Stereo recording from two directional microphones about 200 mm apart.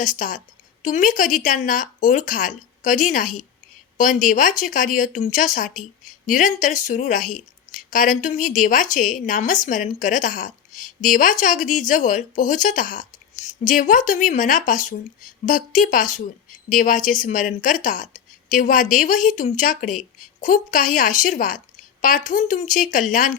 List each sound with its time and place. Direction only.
0.0 s a woman's voice: 40° left (ahead or behind)